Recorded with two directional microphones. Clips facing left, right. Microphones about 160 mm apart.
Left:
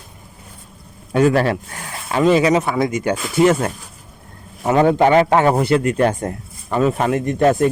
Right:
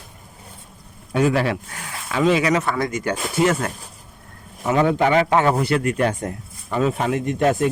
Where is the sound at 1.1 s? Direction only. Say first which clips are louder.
Left 4 dB; 50° left (ahead or behind).